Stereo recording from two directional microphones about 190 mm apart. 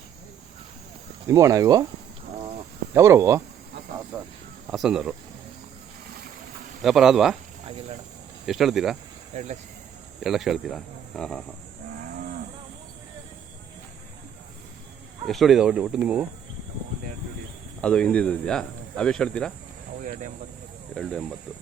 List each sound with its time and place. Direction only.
1.3 s speech: 15° right (ahead or behind)
2.9 s speech: 15° right (ahead or behind)
4.7 s speech: centre (ahead or behind)
6.8 s speech: centre (ahead or behind)
8.4 s speech: centre (ahead or behind)
9.3 s speech: 40° right (ahead or behind)
10.2 s speech: centre (ahead or behind)
15.3 s speech: centre (ahead or behind)
17.7 s speech: 5° left (ahead or behind)
20.1 s speech: 40° right (ahead or behind)
20.9 s speech: 5° left (ahead or behind)